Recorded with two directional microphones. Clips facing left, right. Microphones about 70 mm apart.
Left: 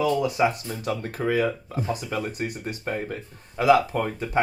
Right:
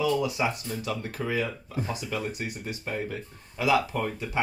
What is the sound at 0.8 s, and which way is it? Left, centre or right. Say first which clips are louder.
Speech: left 4 dB; left.